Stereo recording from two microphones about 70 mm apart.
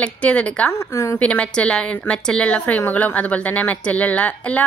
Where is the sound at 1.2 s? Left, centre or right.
Centre.